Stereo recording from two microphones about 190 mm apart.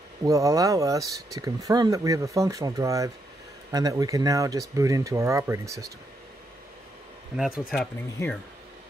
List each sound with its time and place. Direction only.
0.2 s speech: 15° right (ahead or behind)
7.3 s speech: centre (ahead or behind)